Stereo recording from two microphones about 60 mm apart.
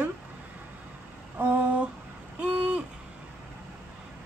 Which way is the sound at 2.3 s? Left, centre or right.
Right.